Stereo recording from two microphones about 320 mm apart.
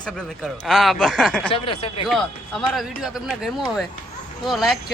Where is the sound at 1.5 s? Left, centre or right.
Centre.